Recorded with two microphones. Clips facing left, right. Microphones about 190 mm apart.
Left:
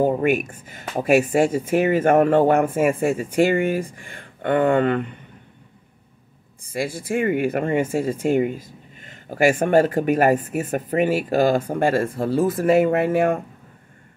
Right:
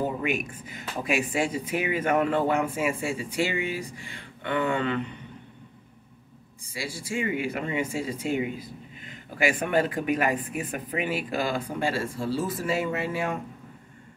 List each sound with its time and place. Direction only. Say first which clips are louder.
0.0 s speech: left 9 dB; 50° left (ahead or behind)
6.6 s speech: left 9 dB; 55° left (ahead or behind)